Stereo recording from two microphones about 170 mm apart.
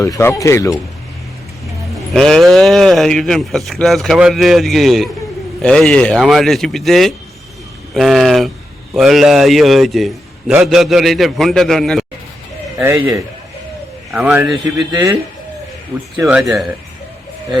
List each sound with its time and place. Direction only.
0.0 s speech: 15° left (ahead or behind)
2.1 s speech: centre (ahead or behind)
12.8 s a man's voice: 15° right (ahead or behind)